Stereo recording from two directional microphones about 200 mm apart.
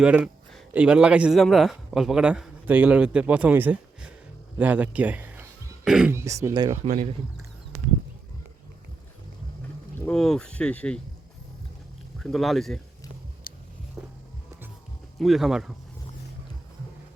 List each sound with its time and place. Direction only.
0.0 s speech: 5° right (ahead or behind)
6.8 s speech: 35° right (ahead or behind)
10.1 s speech: 5° left (ahead or behind)
12.2 s speech: centre (ahead or behind)
13.5 s a sound: 50° left (ahead or behind)
14.0 s music: 5° right (ahead or behind)
15.2 s speech: centre (ahead or behind)